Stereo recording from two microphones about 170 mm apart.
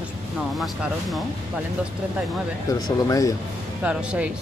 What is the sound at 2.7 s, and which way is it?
Speech, 20° left (ahead or behind).